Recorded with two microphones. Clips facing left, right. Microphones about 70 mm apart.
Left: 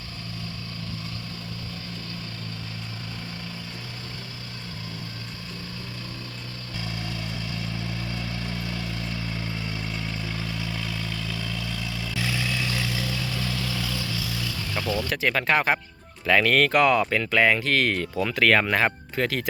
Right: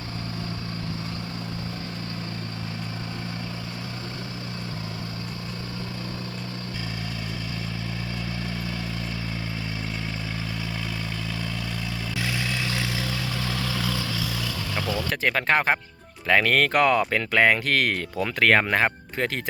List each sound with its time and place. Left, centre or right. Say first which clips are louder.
12.1 s vehicle: left 1 dB; centre
12.5 s vehicle: even; right
13.7 s vehicle: right 3 dB; right
14.9 s speech: even; right